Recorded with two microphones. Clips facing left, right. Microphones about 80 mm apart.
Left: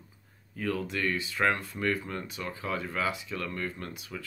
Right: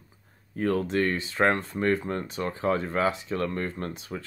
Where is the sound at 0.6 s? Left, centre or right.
Right.